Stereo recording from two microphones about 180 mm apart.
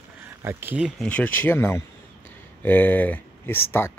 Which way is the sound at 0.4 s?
10° right (ahead or behind).